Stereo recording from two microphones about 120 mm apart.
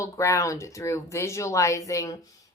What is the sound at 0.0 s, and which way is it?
A woman's voice, 25° left (ahead or behind).